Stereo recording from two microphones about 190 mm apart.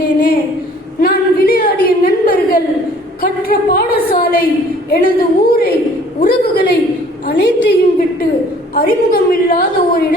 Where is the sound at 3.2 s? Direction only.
50° left (ahead or behind).